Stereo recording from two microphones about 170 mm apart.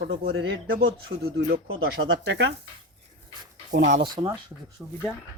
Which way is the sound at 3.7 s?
50° right (ahead or behind).